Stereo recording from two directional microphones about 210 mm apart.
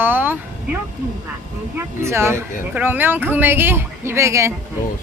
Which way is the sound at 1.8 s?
10° right (ahead or behind).